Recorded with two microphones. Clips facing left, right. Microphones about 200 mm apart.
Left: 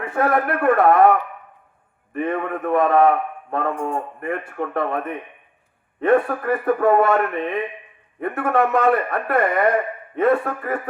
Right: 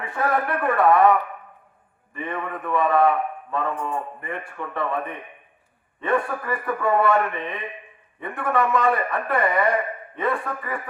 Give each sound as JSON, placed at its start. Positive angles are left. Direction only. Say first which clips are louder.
{"t": 0.1, "sound": "a man's voice", "louder": "left 4 dB", "side_deg": 55}
{"t": 6.0, "sound": "a man's voice", "louder": "left 6 dB", "side_deg": 50}
{"t": 8.8, "sound": "a man's voice", "louder": "left 4 dB", "side_deg": 65}
{"t": 9.2, "sound": "a man's voice", "louder": "left 2 dB", "side_deg": 50}